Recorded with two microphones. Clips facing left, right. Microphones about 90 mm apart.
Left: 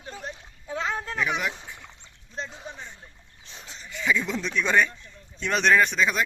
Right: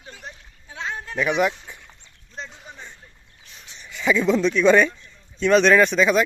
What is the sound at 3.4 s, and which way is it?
Livestock, 25° left (ahead or behind).